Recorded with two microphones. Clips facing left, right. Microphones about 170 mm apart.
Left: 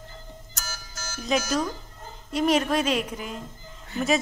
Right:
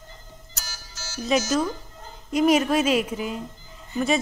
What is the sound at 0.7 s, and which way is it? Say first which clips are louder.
Music: left 4 dB; 50° left (ahead or behind).